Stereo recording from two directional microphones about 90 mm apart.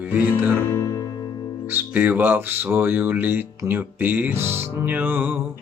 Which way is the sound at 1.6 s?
20° right (ahead or behind).